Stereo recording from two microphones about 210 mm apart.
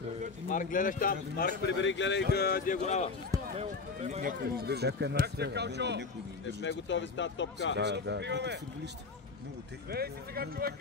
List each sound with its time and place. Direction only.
0.5 s speech: 40° left (ahead or behind)
1.8 s speech: 60° left (ahead or behind)
2.3 s speech: 45° left (ahead or behind)
3.5 s speech: 30° right (ahead or behind); by 6.0 s 55° right (ahead or behind)
6.6 s speech: 60° left (ahead or behind)
7.7 s speech: 55° right (ahead or behind)
9.8 s speech: 50° right (ahead or behind)